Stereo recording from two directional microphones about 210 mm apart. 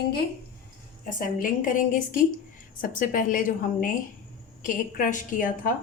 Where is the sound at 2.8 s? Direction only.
40° left (ahead or behind).